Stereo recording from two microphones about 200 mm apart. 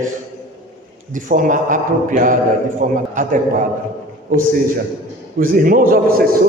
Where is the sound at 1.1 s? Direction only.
40° right (ahead or behind).